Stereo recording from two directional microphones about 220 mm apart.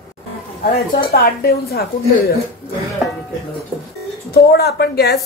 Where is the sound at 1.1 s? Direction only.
45° left (ahead or behind).